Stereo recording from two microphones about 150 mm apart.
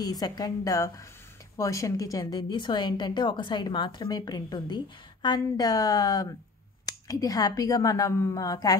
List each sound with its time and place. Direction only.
0.0 s speech: 25° left (ahead or behind)